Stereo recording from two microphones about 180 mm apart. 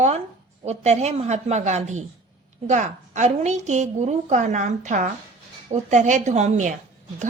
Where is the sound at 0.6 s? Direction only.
35° right (ahead or behind).